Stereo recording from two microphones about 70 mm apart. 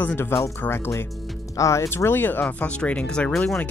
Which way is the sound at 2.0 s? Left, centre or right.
Left.